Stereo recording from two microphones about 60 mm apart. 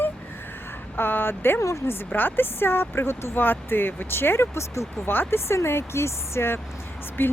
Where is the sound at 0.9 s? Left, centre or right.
Left.